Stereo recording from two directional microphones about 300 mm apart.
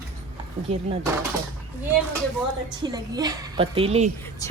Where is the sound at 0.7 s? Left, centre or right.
Right.